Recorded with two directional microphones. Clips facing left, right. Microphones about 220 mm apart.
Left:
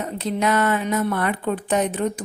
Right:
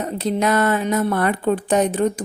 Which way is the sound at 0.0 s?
35° right (ahead or behind).